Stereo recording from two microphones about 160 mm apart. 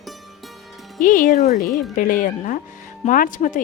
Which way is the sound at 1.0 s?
55° left (ahead or behind).